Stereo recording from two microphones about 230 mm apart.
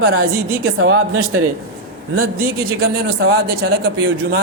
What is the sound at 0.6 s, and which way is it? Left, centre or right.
Speech, right.